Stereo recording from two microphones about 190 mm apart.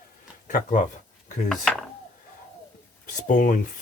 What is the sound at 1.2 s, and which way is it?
Dishes, 40° left (ahead or behind).